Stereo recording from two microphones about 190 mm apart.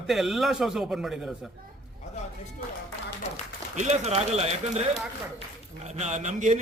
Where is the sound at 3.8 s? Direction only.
35° right (ahead or behind).